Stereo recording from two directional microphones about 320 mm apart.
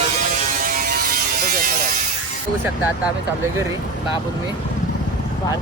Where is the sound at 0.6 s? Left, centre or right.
Right.